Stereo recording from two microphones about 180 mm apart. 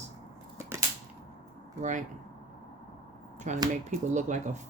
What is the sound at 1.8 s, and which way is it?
Speech, 45° right (ahead or behind).